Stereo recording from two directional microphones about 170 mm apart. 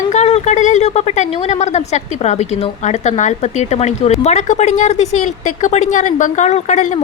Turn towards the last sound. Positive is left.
turn(degrees=45)  # may be behind; listen again after turning